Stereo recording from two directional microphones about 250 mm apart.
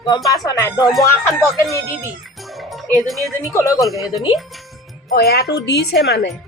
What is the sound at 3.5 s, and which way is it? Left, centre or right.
Speech, centre.